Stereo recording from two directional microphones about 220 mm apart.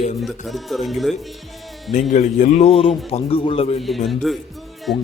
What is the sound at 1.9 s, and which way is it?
A man's voice, 35° left (ahead or behind).